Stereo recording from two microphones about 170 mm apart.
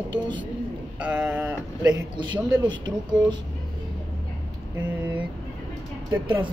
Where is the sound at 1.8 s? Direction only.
20° right (ahead or behind).